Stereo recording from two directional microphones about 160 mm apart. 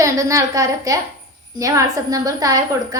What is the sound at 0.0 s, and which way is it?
A woman's voice, 20° right (ahead or behind).